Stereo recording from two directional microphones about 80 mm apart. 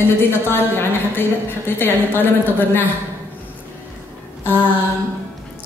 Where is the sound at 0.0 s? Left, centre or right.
Left.